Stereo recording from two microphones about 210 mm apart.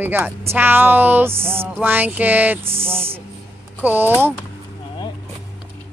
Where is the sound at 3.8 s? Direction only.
10° right (ahead or behind).